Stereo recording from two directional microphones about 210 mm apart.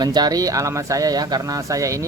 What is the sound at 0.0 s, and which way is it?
Speech, 20° right (ahead or behind).